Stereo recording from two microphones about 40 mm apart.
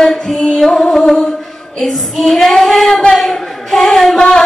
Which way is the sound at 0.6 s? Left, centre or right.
Centre.